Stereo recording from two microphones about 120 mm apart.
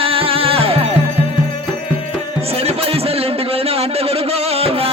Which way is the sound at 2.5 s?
55° right (ahead or behind).